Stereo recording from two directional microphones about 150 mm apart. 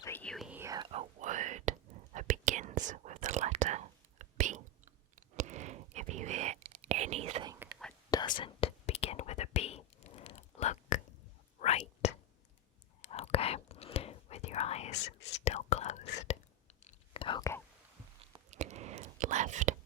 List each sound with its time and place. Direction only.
0.0 s whispering: 10° left (ahead or behind)
0.3 s whispering: 5° right (ahead or behind)
0.6 s whispering: 25° right (ahead or behind)
0.9 s whispering: 50° right (ahead or behind)
8.4 s whispering: 35° left (ahead or behind)
16.8 s whispering: 35° left (ahead or behind)
18.5 s whispering: 50° right (ahead or behind)